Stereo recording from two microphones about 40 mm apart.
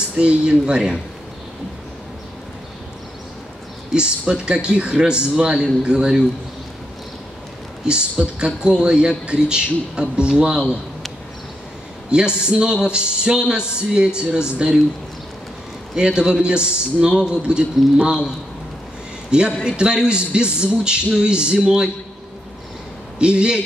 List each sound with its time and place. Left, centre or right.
0.1 s speech: right
3.9 s speech: right
7.8 s speech: right
12.1 s speech: right
15.9 s speech: right
19.6 s speech: right
23.1 s speech: right